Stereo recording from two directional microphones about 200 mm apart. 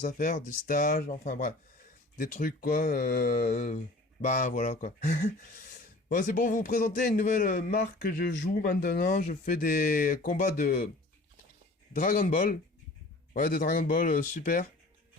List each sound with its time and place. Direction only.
0.0 s speech: 50° left (ahead or behind)
11.9 s speech: 45° left (ahead or behind)